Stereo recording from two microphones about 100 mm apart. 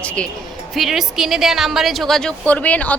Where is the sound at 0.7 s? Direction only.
Centre (ahead or behind); by 3.0 s 15° left (ahead or behind).